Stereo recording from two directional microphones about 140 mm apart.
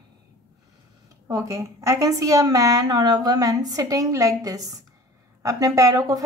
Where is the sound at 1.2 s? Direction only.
25° right (ahead or behind).